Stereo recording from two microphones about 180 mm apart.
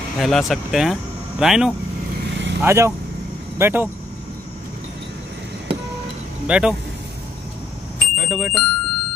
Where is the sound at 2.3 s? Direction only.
85° right.